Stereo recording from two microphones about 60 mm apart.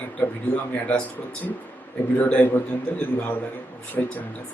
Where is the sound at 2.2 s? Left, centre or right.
Left.